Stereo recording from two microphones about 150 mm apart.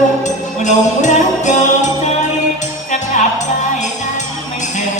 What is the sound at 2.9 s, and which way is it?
Music, 60° left (ahead or behind).